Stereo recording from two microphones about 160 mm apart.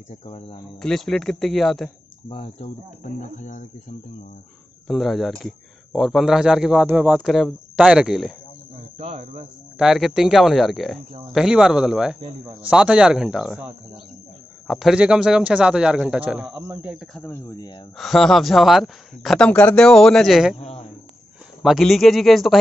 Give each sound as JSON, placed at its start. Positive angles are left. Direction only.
{"t": 0.1, "sound": "speech", "side_deg": 35}
{"t": 0.8, "sound": "speech", "side_deg": 0}
{"t": 2.2, "sound": "speech", "side_deg": 40}
{"t": 4.8, "sound": "speech", "side_deg": 0}
{"t": 8.9, "sound": "speech", "side_deg": -40}
{"t": 9.8, "sound": "speech", "side_deg": 0}
{"t": 14.7, "sound": "speech", "side_deg": 0}
{"t": 16.5, "sound": "speech", "side_deg": -20}
{"t": 16.8, "sound": "speech", "side_deg": 0}
{"t": 17.2, "sound": "speech", "side_deg": 15}
{"t": 17.9, "sound": "speech", "side_deg": 0}
{"t": 20.5, "sound": "speech", "side_deg": 40}
{"t": 21.6, "sound": "speech", "side_deg": 0}